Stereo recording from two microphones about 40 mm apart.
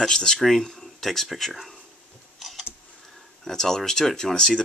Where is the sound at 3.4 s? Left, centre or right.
Centre.